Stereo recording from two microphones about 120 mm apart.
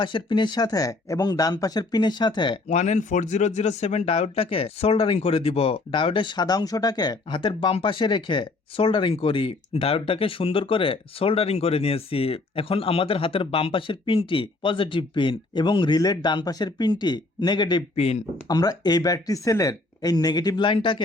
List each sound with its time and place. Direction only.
0.0 s speech: 40° left (ahead or behind)
2.6 s speech: 75° left (ahead or behind); by 17.8 s 40° left (ahead or behind)
17.9 s speech: 60° left (ahead or behind)
18.4 s speech: 35° left (ahead or behind)